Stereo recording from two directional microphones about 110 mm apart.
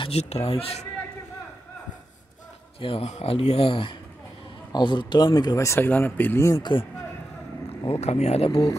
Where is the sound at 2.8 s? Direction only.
55° left (ahead or behind).